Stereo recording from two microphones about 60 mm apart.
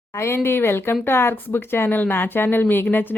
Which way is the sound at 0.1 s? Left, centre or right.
Left.